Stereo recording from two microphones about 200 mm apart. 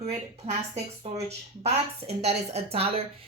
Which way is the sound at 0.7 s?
30° right (ahead or behind).